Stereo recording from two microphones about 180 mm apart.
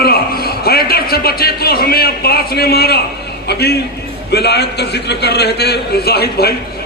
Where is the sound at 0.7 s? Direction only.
60° left (ahead or behind).